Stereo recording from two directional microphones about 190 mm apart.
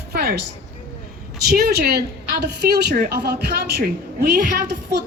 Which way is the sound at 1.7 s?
55° right (ahead or behind).